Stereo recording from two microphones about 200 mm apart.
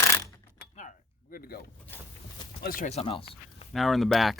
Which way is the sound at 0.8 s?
40° left (ahead or behind).